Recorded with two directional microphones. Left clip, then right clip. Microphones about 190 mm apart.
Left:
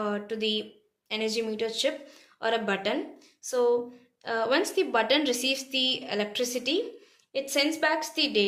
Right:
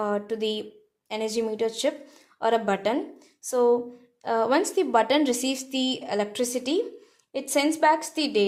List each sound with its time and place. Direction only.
0.0 s a woman's voice: 60° right (ahead or behind)